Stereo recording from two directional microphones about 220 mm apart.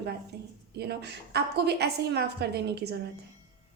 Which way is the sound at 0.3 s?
45° right (ahead or behind).